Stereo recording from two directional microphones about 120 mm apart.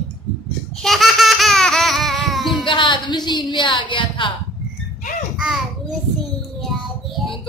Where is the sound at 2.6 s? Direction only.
45° left (ahead or behind).